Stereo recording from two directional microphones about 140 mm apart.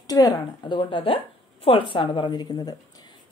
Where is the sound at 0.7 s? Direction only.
40° left (ahead or behind).